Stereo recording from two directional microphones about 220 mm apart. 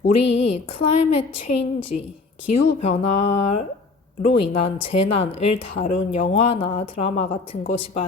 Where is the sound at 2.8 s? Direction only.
30° left (ahead or behind).